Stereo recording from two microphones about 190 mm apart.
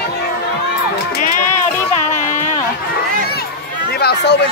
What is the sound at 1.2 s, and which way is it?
Music, 40° left (ahead or behind).